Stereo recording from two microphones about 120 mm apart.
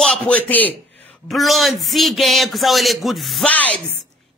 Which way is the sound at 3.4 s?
10° left (ahead or behind).